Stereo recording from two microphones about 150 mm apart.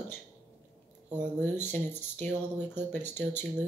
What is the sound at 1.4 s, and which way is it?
Speech, 15° left (ahead or behind).